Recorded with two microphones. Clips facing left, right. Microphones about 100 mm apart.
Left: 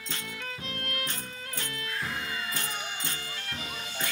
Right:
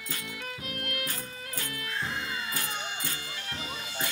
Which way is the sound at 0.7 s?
30° left (ahead or behind).